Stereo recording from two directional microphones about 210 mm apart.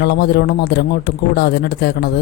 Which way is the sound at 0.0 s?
50° left (ahead or behind).